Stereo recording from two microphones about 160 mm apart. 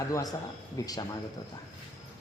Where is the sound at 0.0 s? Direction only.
20° left (ahead or behind).